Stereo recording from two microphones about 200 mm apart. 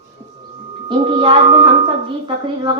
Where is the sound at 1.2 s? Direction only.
25° right (ahead or behind).